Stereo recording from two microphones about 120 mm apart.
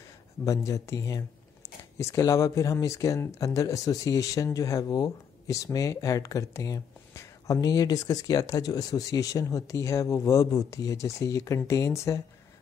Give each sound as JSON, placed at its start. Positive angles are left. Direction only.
{"t": 0.5, "sound": "speech", "side_deg": 25}